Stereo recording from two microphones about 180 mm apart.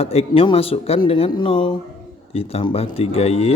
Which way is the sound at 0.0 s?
35° left (ahead or behind).